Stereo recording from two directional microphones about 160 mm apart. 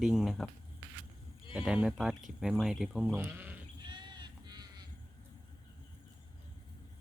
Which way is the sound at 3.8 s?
30° right (ahead or behind).